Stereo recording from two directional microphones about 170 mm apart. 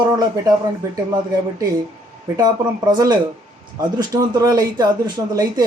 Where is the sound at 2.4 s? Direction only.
25° right (ahead or behind).